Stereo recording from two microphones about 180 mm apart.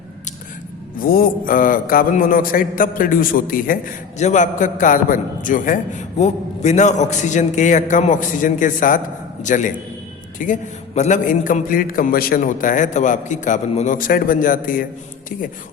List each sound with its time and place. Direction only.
0.9 s a man's voice: 55° left (ahead or behind)